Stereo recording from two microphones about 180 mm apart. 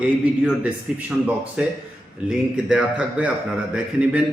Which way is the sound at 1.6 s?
5° right (ahead or behind).